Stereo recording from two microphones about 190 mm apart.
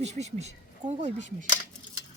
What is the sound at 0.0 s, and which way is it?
Speech, 35° right (ahead or behind).